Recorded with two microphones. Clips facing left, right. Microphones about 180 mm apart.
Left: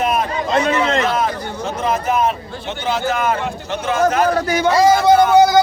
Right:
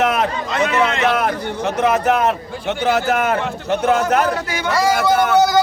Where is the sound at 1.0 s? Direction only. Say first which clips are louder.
Right 2 dB; 65° right (ahead or behind).